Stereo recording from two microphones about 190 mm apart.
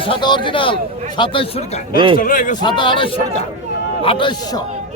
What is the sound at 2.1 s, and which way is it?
Speech, 45° left (ahead or behind).